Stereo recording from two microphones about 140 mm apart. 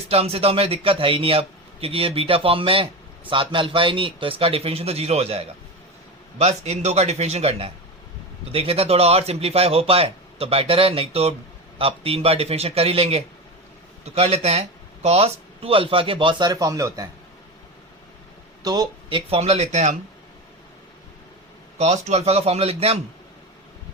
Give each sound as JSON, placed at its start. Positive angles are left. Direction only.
{"t": 0.1, "sound": "a man's voice", "side_deg": -45}
{"t": 18.6, "sound": "speech", "side_deg": -30}
{"t": 21.8, "sound": "speech", "side_deg": -50}